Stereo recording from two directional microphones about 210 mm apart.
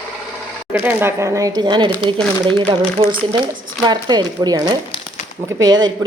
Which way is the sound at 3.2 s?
25° right (ahead or behind).